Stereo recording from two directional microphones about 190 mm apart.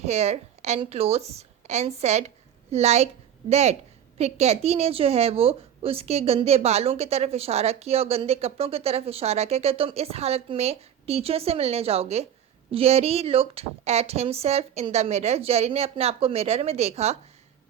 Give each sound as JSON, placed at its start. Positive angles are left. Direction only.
{"t": 0.0, "sound": "a woman's voice", "side_deg": -35}